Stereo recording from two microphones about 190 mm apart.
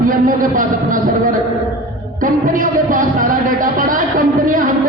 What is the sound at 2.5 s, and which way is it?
Speech, 45° right (ahead or behind).